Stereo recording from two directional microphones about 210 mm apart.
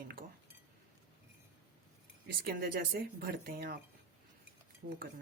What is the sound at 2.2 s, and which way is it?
A woman's voice, 45° right (ahead or behind).